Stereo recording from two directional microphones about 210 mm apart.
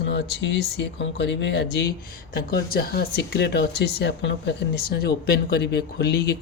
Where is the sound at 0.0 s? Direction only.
55° left (ahead or behind).